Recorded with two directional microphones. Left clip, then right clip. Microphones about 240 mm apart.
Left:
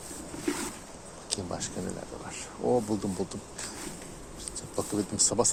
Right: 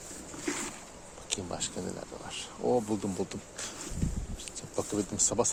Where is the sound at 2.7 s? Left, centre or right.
Right.